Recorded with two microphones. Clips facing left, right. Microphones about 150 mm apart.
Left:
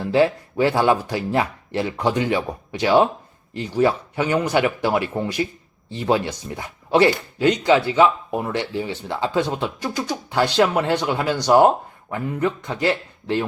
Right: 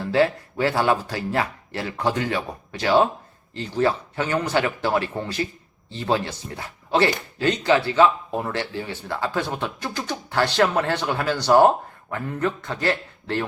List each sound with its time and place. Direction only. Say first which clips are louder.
0.0 s speech: left 2 dB; 15° left (ahead or behind)